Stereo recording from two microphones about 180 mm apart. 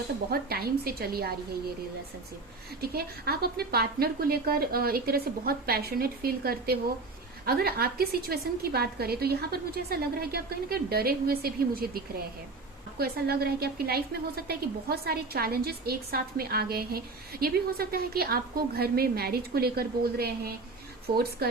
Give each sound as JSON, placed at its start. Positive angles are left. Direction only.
{"t": 0.3, "sound": "a woman's voice", "side_deg": -60}
{"t": 2.9, "sound": "a woman's voice", "side_deg": -60}
{"t": 13.0, "sound": "a woman's voice", "side_deg": -60}